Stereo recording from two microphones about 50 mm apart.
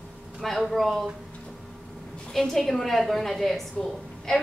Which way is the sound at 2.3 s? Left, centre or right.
Centre.